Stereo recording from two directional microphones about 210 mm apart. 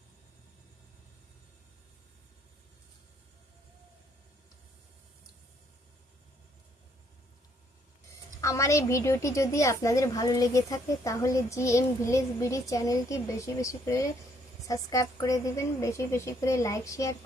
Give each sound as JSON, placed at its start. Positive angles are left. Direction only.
{"t": 8.4, "sound": "a woman's voice", "side_deg": 15}